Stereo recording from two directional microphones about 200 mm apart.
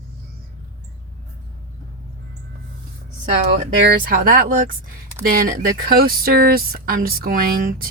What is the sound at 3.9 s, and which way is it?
Speech, 45° right (ahead or behind).